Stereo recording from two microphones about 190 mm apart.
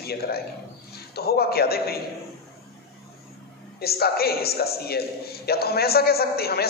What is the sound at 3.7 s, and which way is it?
A man's voice, 55° left (ahead or behind).